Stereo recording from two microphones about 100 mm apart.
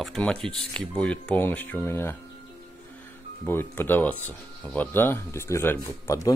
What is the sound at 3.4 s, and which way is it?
Speech, 20° left (ahead or behind).